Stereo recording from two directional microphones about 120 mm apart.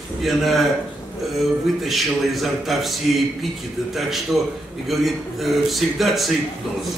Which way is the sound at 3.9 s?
Centre (ahead or behind).